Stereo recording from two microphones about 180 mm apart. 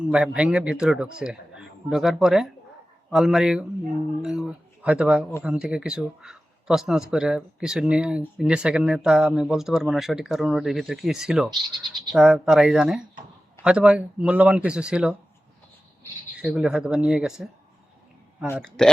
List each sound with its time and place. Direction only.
0.0 s speech: 5° right (ahead or behind)
16.4 s speech: 5° right (ahead or behind)
18.5 s speech: centre (ahead or behind)